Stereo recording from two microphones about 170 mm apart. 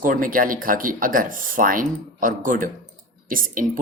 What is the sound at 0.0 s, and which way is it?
Speech, 55° right (ahead or behind).